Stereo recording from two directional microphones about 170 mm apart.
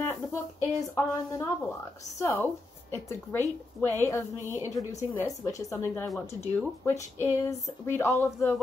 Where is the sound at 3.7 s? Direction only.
10° left (ahead or behind).